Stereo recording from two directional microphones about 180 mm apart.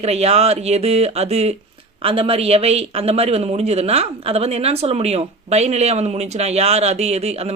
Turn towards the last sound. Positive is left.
turn(degrees=-35)  # may be behind; listen again after turning